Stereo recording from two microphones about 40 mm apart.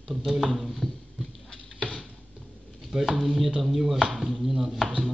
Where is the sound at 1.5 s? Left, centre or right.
Left.